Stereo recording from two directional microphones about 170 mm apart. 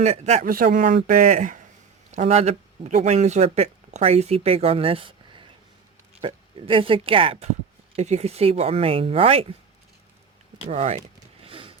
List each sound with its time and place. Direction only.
0.0 s speech: 40° right (ahead or behind)
0.5 s speech: 55° right (ahead or behind); by 9.5 s 35° right (ahead or behind)
10.7 s speech: 40° right (ahead or behind)
11.4 s a sound: 30° right (ahead or behind)